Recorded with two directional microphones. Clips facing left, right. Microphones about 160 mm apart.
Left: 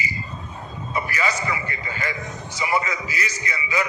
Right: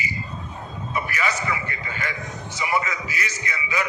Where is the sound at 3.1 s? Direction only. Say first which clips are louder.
Left 1 dB; 30° left (ahead or behind).